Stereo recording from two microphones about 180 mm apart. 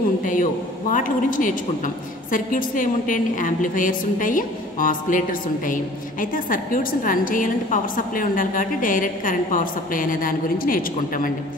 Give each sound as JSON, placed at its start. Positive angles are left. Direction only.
{"t": 0.2, "sound": "a woman's voice", "side_deg": 45}
{"t": 6.3, "sound": "a woman's voice", "side_deg": 50}